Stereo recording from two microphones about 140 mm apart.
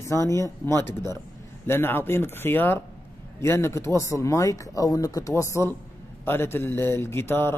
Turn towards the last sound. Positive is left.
turn(degrees=15)  # may be behind; listen again after turning